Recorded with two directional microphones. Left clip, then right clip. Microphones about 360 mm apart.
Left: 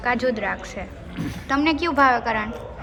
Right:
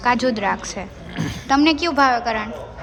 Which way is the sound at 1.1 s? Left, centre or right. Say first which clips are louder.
Right 6 dB; right.